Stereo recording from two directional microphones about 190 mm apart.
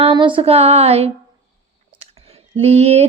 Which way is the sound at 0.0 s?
25° right (ahead or behind).